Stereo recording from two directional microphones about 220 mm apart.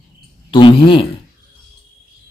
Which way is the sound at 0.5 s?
25° left (ahead or behind).